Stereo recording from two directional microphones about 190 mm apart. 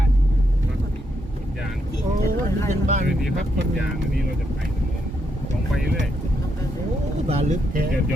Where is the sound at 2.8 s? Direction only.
40° right (ahead or behind).